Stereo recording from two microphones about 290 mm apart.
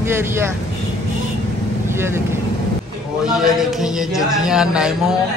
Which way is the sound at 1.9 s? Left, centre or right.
Centre.